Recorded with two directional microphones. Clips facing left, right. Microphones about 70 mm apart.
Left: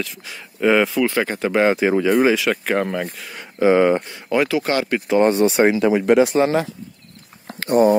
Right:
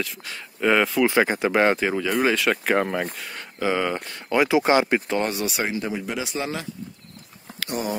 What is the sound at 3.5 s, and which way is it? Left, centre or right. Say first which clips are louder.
Speech: left 9 dB; left.